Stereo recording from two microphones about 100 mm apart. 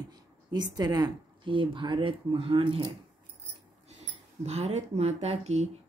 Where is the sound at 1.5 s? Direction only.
60° right (ahead or behind).